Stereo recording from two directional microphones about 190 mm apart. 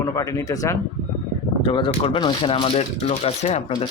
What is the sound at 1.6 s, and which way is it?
Speech, 25° left (ahead or behind).